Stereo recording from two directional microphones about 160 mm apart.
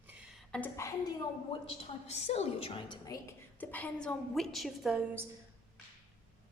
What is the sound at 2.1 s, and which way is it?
Speech, 45° left (ahead or behind).